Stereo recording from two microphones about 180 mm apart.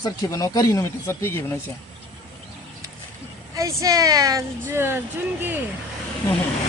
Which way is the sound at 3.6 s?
20° right (ahead or behind).